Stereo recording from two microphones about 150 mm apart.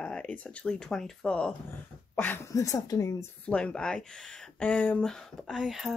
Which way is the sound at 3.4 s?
5° left (ahead or behind).